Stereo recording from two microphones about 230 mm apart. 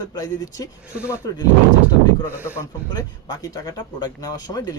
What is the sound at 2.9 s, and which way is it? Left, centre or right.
Speech, centre.